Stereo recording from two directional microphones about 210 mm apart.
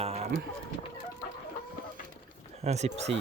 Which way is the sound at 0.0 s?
30° right (ahead or behind).